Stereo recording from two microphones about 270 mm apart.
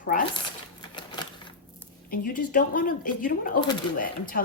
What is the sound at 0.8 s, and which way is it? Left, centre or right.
Typewriter, centre.